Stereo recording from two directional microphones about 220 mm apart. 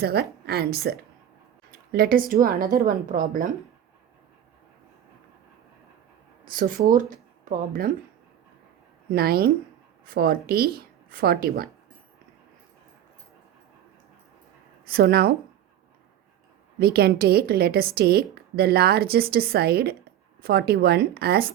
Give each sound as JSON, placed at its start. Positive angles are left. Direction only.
{"t": 0.0, "sound": "a woman's voice", "side_deg": -45}
{"t": 6.5, "sound": "speech", "side_deg": -40}
{"t": 9.1, "sound": "a woman's voice", "side_deg": -45}
{"t": 14.8, "sound": "a woman's voice", "side_deg": -45}
{"t": 16.8, "sound": "a woman's voice", "side_deg": -45}